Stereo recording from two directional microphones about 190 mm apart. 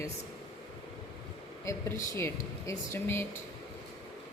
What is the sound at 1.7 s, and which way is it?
Speech, 15° left (ahead or behind).